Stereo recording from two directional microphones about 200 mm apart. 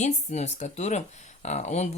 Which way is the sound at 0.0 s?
35° left (ahead or behind).